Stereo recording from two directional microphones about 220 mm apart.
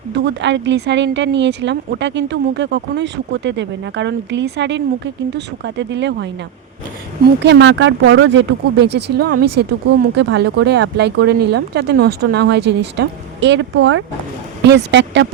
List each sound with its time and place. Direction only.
0.1 s speech: 55° right (ahead or behind)
7.4 s speech: 55° right (ahead or behind)